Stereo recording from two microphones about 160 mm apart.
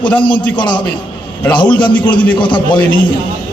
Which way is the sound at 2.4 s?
30° left (ahead or behind).